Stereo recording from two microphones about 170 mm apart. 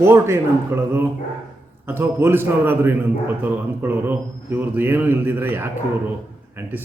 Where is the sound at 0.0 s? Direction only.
15° right (ahead or behind).